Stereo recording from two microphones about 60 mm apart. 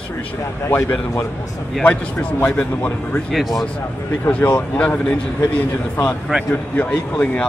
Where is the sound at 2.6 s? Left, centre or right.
Left.